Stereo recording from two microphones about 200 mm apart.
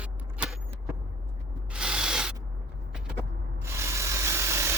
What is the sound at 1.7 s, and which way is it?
Spray, 5° right (ahead or behind).